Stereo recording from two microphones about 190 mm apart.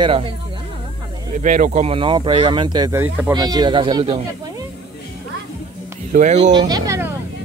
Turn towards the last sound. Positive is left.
turn(degrees=-15)  # may be behind; listen again after turning